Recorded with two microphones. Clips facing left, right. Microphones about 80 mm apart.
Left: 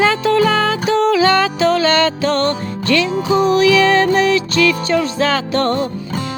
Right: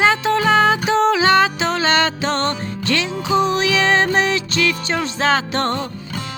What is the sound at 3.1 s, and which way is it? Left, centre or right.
Music, left.